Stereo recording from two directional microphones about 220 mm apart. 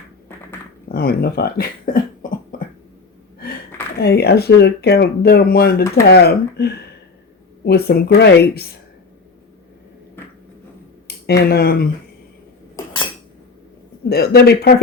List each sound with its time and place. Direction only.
0.9 s speech: 45° left (ahead or behind)
2.5 s a sound: 40° left (ahead or behind)
3.9 s speech: 45° left (ahead or behind)
11.3 s speech: 45° left (ahead or behind)
14.1 s speech: 45° left (ahead or behind)